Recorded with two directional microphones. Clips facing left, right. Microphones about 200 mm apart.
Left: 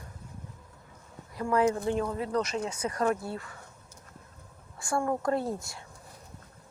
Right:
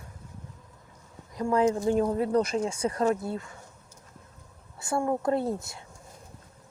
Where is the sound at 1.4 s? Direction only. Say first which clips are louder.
Right 2 dB; 20° right (ahead or behind).